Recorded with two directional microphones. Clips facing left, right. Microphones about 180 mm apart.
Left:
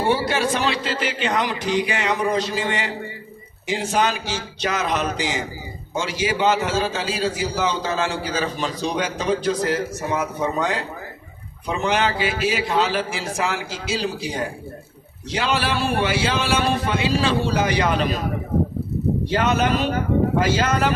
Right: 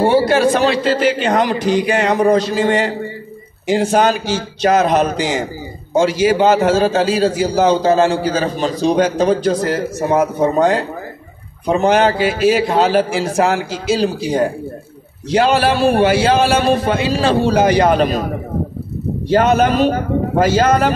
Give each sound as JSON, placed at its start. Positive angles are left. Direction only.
{"t": 0.0, "sound": "a man's voice", "side_deg": -40}
{"t": 19.3, "sound": "a man's voice", "side_deg": -45}